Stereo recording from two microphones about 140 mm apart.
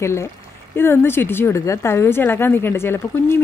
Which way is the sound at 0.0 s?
20° left (ahead or behind).